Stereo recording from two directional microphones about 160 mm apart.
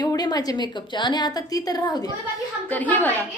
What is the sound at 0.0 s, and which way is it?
A woman's voice, 25° left (ahead or behind).